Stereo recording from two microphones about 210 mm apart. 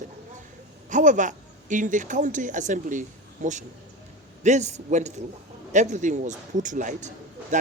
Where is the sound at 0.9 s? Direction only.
35° right (ahead or behind).